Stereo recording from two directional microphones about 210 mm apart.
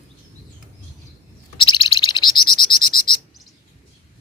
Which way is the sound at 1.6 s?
25° left (ahead or behind).